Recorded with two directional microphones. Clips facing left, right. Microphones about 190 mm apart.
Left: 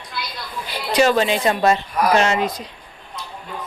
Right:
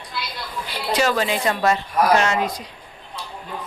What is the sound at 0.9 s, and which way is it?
A woman's voice, 25° left (ahead or behind).